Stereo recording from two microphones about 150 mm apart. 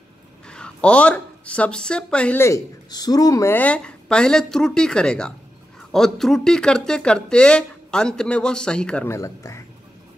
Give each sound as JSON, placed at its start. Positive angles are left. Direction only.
{"t": 0.5, "sound": "speech", "side_deg": 5}
{"t": 2.4, "sound": "speech", "side_deg": 25}
{"t": 9.1, "sound": "speech", "side_deg": 20}